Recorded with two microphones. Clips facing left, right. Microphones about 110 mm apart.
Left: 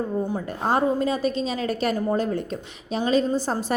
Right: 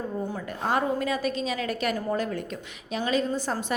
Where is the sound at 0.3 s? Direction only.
35° left (ahead or behind).